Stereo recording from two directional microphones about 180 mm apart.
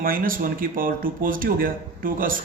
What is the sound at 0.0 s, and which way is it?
Speech, 50° right (ahead or behind).